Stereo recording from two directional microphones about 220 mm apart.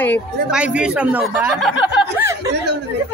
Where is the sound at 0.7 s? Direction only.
5° right (ahead or behind).